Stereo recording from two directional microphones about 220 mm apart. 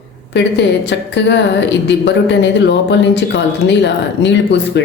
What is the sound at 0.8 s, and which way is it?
A woman's voice, 50° left (ahead or behind).